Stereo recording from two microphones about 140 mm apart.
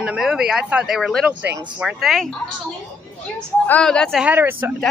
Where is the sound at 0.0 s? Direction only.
5° right (ahead or behind).